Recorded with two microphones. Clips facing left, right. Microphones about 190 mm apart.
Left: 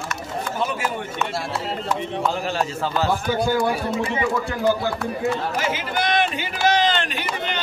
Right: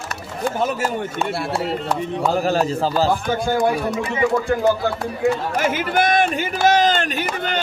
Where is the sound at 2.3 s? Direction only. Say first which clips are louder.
Right 6 dB; 40° right (ahead or behind).